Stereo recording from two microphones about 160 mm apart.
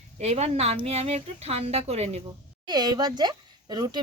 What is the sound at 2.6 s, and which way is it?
A woman's voice, 25° right (ahead or behind).